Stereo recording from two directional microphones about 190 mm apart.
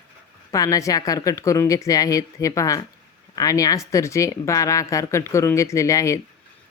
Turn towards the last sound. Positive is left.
turn(degrees=15)  # may be behind; listen again after turning